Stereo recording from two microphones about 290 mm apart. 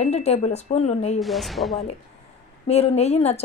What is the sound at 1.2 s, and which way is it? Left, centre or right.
Speech, centre.